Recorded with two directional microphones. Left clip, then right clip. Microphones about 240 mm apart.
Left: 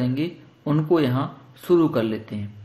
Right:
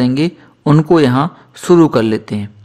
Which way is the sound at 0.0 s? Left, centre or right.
Right.